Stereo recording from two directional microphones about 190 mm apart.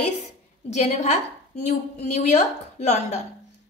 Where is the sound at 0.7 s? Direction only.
35° left (ahead or behind).